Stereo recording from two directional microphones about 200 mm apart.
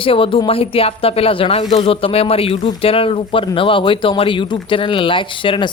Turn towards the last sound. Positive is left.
turn(degrees=25)  # may be behind; listen again after turning